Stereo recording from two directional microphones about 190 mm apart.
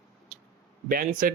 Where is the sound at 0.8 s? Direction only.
50° right (ahead or behind).